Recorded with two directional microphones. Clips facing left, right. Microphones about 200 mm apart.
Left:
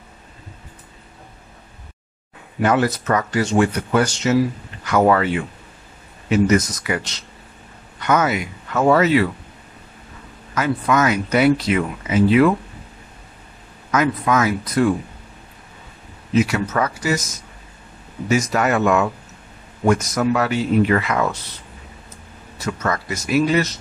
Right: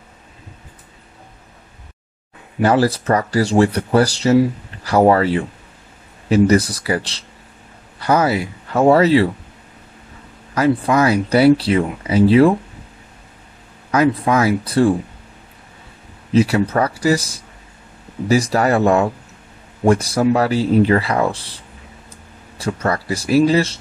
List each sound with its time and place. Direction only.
2.6 s speech: 30° right (ahead or behind)
10.5 s speech: 35° right (ahead or behind)
13.9 s speech: 30° right (ahead or behind)
16.3 s speech: 35° right (ahead or behind)